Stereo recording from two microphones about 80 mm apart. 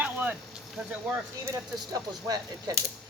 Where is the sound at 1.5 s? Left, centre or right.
Right.